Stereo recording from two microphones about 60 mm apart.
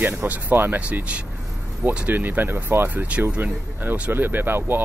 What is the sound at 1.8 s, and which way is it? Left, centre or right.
Speech, right.